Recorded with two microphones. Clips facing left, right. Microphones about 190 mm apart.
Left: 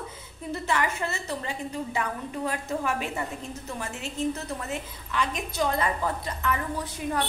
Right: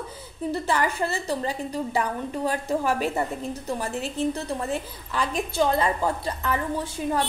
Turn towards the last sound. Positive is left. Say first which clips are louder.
# right 4 dB
turn(degrees=-30)  # may be behind; listen again after turning